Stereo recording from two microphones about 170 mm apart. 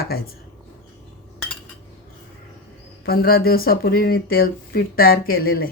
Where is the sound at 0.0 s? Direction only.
65° left (ahead or behind).